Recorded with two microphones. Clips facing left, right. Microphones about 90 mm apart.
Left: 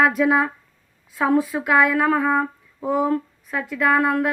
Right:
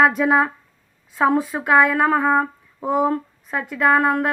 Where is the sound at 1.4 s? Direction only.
35° right (ahead or behind).